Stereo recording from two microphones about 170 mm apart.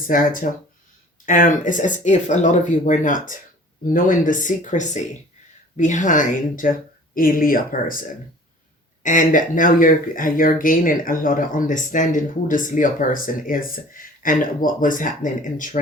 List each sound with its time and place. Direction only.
0.1 s speech: 55° left (ahead or behind)
9.0 s speech: 50° left (ahead or behind)